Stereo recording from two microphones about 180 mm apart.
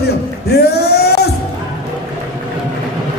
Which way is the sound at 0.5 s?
65° left (ahead or behind).